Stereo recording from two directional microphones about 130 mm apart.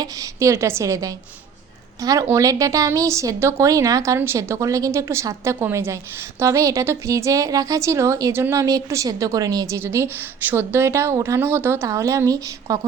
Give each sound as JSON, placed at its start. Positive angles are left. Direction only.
{"t": 0.0, "sound": "a woman's voice", "side_deg": -25}